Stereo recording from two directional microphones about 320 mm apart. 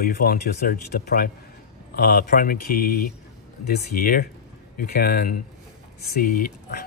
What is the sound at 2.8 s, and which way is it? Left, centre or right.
Speech, left.